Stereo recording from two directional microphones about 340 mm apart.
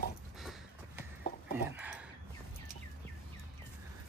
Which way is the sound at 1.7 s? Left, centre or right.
Centre.